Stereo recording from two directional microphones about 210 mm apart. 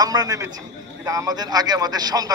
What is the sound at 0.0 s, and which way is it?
A man's voice, 20° right (ahead or behind).